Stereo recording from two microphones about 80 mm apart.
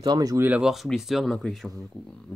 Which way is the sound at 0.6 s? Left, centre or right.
Centre.